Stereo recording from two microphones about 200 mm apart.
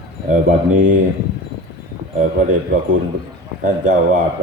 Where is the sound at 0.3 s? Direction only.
40° right (ahead or behind).